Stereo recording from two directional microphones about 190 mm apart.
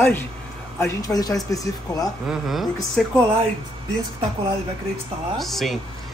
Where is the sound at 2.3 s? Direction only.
Centre (ahead or behind).